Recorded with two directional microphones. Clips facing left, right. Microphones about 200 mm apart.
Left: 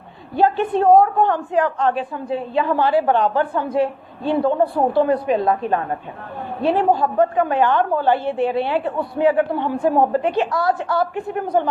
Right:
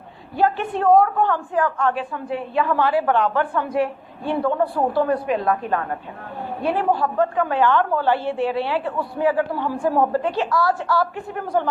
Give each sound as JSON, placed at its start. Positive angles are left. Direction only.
{"t": 0.3, "sound": "a woman's voice", "side_deg": 20}
{"t": 3.2, "sound": "a woman's voice", "side_deg": 35}